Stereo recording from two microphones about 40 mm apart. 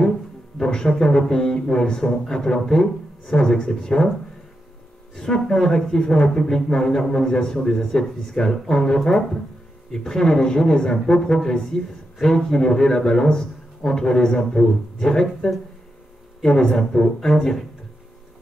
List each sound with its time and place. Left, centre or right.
0.6 s speech: centre
5.1 s speech: centre